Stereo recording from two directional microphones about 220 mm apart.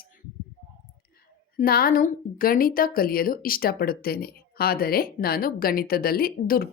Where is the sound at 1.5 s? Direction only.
40° left (ahead or behind).